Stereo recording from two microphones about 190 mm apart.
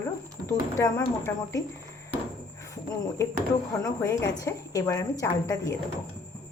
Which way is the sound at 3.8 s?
15° left (ahead or behind).